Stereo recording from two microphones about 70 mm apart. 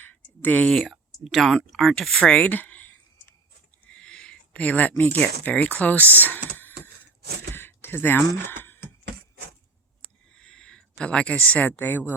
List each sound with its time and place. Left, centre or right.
0.0 s a sound: left
0.7 s speech: centre; by 3.3 s left
3.9 s speech: centre; by 8.8 s left
10.3 s speech: centre; by 12.1 s left